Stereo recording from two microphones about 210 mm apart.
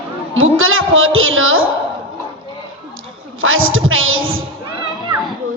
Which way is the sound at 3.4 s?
70° right (ahead or behind).